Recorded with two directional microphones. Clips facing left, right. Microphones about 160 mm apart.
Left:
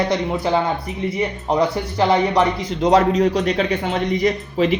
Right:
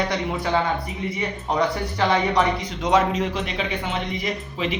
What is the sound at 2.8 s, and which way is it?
A man's voice, 35° left (ahead or behind).